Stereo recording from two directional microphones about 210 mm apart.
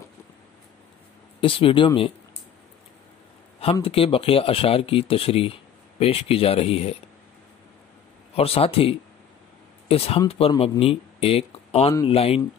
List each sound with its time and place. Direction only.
1.4 s speech: 25° left (ahead or behind)
3.7 s speech: 25° left (ahead or behind)
8.4 s speech: 30° left (ahead or behind)